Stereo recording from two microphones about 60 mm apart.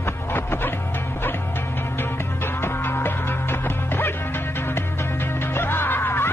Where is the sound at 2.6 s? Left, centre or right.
Left.